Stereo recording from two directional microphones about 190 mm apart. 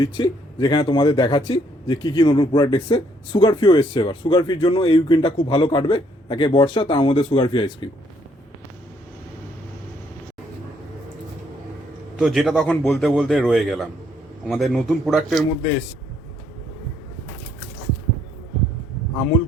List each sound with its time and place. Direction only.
0.0 s speech: 20° left (ahead or behind)
12.1 s a man's voice: 5° right (ahead or behind)